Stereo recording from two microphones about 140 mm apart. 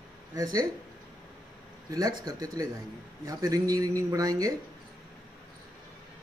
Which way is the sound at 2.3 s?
25° right (ahead or behind).